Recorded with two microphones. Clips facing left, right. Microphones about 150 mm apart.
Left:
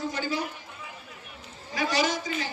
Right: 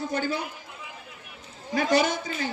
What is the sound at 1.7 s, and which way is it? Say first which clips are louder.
Speech: right 4 dB; 55° right (ahead or behind).